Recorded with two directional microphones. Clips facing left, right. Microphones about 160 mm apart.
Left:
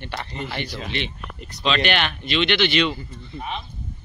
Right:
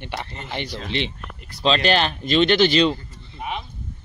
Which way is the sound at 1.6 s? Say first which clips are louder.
Right 3 dB; 35° right (ahead or behind).